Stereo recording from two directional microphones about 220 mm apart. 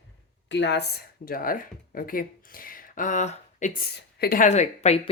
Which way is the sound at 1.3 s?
40° left (ahead or behind).